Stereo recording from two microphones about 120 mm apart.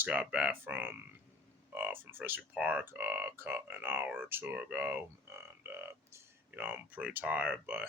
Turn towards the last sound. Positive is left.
turn(degrees=-15)  # may be behind; listen again after turning